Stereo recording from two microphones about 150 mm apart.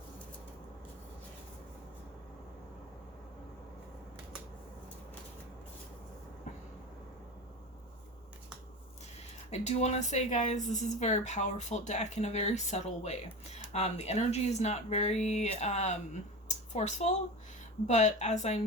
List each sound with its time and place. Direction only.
9.5 s speech: 50° left (ahead or behind)